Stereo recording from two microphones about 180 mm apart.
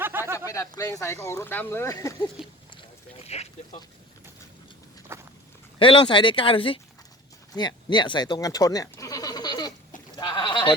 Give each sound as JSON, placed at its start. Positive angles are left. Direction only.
{"t": 0.0, "sound": "a sound", "side_deg": -10}
{"t": 0.3, "sound": "speech", "side_deg": 15}
{"t": 2.4, "sound": "speech", "side_deg": 0}
{"t": 3.2, "sound": "a sound", "side_deg": 35}
{"t": 5.1, "sound": "walk", "side_deg": -15}
{"t": 5.8, "sound": "speech", "side_deg": 30}
{"t": 7.5, "sound": "bleat", "side_deg": 25}
{"t": 10.2, "sound": "goat", "side_deg": 25}